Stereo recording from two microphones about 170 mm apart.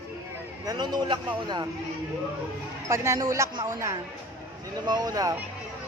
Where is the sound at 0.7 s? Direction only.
25° right (ahead or behind).